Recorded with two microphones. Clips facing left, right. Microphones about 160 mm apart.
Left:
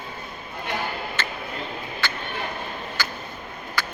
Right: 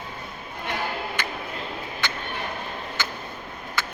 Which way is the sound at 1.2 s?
15° right (ahead or behind).